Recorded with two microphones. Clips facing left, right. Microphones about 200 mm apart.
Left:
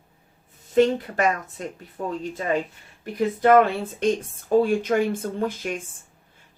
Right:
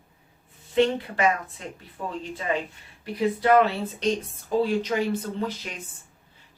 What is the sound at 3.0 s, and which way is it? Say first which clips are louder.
Speech: left 3 dB; 50° left (ahead or behind).